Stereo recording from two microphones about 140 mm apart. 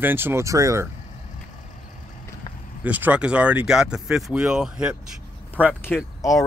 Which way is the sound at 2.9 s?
10° right (ahead or behind).